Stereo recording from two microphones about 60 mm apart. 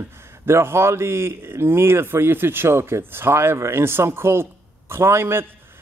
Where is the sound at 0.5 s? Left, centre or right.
Right.